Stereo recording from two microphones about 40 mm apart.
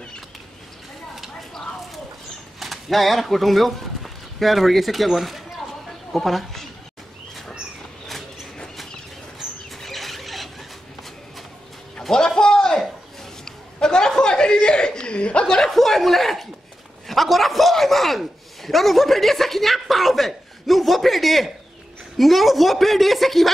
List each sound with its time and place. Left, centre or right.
2.6 s a woman's voice: centre
9.8 s rodents: centre
12.1 s a sound: centre
13.5 s chuckle: centre
15.4 s chuckle: centre
17.1 s a sound: centre